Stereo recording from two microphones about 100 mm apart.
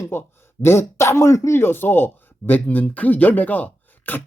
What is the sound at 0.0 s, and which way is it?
Speech, 25° left (ahead or behind).